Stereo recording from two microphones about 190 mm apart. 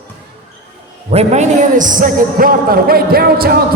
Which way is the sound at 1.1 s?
35° right (ahead or behind).